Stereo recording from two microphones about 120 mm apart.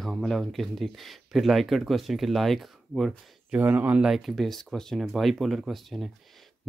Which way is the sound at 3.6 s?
15° right (ahead or behind).